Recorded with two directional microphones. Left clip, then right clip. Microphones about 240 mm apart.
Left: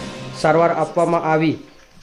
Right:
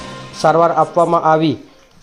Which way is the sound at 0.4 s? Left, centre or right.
Centre.